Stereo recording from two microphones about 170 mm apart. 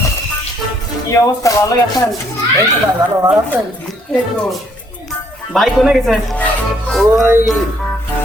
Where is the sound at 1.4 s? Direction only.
20° left (ahead or behind).